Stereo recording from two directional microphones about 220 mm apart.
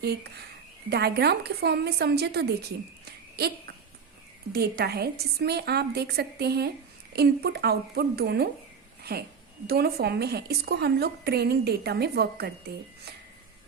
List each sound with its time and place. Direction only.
0.0 s a woman's voice: 45° right (ahead or behind)